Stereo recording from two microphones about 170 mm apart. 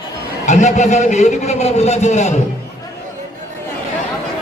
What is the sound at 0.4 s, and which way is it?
A man's voice, 45° left (ahead or behind).